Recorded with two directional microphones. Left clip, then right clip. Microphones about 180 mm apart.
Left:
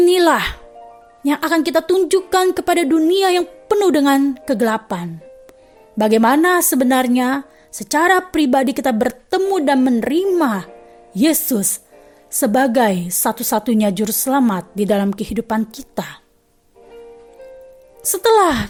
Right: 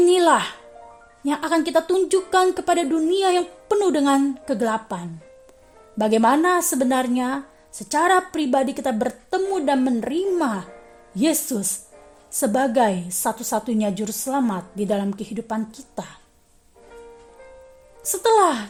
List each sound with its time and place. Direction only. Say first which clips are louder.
0.0 s speech: left 3 dB; 35° left (ahead or behind)
18.0 s speech: left 4 dB; 35° left (ahead or behind)